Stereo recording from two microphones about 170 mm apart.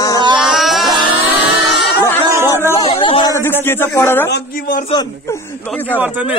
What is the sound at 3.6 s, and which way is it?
Speech, 15° left (ahead or behind).